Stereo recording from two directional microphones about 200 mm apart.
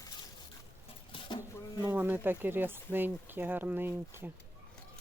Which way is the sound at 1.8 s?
10° right (ahead or behind).